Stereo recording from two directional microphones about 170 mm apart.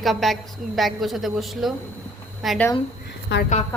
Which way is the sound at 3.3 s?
90° left.